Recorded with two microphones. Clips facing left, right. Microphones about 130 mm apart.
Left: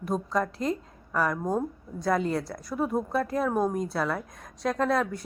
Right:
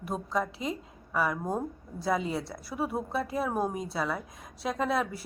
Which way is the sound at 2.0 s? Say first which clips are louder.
Left 3 dB; 5° right (ahead or behind).